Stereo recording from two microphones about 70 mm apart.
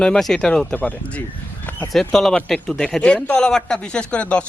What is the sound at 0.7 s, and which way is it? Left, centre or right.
Speech, left.